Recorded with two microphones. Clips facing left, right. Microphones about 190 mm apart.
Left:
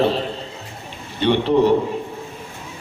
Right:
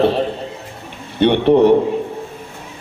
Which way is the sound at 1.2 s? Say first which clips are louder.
Right 5 dB; 60° right (ahead or behind).